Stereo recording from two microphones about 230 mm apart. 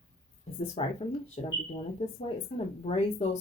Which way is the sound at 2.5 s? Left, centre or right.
Left.